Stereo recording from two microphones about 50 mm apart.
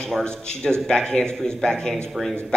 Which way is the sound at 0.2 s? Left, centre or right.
Centre.